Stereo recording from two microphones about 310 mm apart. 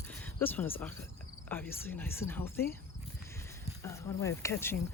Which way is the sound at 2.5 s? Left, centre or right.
Left.